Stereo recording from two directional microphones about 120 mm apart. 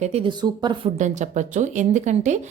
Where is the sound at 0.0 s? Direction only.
60° right (ahead or behind).